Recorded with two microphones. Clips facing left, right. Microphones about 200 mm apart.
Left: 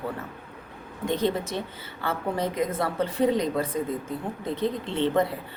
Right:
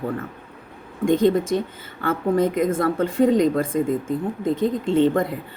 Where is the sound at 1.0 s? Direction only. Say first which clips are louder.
Right 8 dB; 50° right (ahead or behind).